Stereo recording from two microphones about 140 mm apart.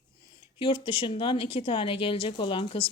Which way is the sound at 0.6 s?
40° left (ahead or behind).